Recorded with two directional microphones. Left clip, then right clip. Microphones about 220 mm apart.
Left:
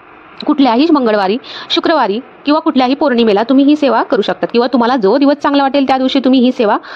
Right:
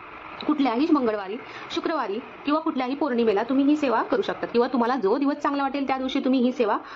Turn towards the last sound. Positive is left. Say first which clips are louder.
# left 12 dB
turn(degrees=40)  # may be behind; listen again after turning